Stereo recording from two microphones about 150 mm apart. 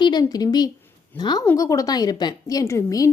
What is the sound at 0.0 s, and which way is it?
A woman's voice, 30° left (ahead or behind).